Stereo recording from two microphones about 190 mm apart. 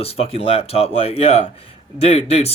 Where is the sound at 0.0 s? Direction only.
30° left (ahead or behind).